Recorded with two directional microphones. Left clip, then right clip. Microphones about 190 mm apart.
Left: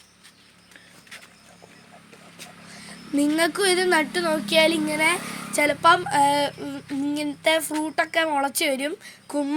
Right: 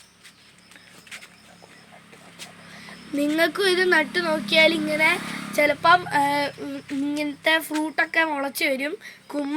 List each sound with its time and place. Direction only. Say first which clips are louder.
2.8 s speech: left 2 dB; 45° left (ahead or behind)